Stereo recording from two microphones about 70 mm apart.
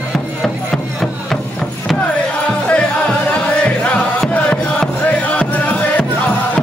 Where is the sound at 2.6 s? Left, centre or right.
Centre.